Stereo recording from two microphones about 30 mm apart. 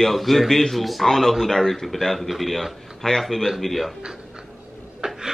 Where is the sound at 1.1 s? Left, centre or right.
Centre.